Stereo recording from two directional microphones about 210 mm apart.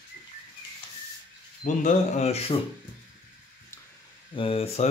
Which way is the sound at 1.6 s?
35° left (ahead or behind).